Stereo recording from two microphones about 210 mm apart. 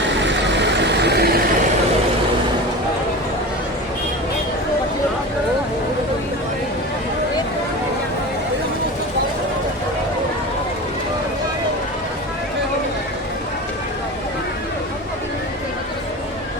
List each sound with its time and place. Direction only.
0.1 s vehicle: 55° right (ahead or behind)